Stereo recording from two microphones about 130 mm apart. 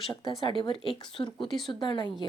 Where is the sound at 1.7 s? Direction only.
40° left (ahead or behind).